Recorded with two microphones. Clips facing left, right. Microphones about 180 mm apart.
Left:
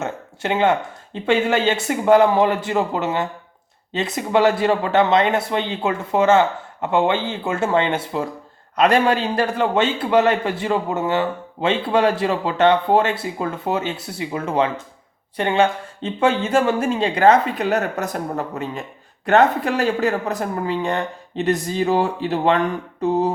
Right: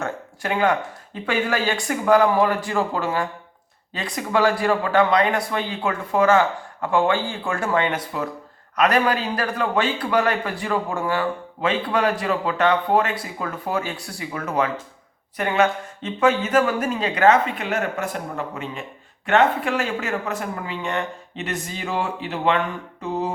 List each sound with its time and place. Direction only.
0.0 s a man's voice: 25° left (ahead or behind)